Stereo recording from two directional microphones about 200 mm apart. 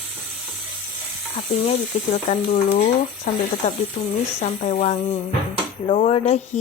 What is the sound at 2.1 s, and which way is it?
A woman's voice, 35° left (ahead or behind).